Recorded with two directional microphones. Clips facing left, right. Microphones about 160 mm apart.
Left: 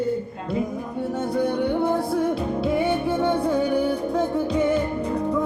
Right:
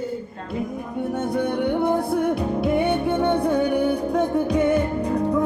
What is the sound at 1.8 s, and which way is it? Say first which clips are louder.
Music: right 1 dB; 15° right (ahead or behind).